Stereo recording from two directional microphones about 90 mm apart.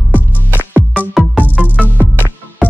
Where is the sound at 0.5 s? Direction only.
20° right (ahead or behind).